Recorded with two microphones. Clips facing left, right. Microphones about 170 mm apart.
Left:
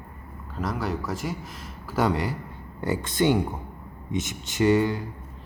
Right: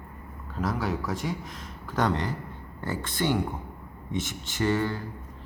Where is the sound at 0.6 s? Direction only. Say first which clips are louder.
Even; centre (ahead or behind); by 5.0 s 15° left (ahead or behind).